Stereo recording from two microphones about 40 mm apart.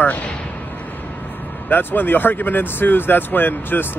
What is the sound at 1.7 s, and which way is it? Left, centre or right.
Speech, left.